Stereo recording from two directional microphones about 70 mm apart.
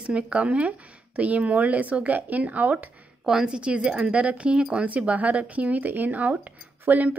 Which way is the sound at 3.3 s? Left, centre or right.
Centre.